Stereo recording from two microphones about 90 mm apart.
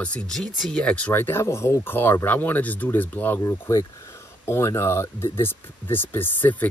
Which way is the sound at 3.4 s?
35° left (ahead or behind).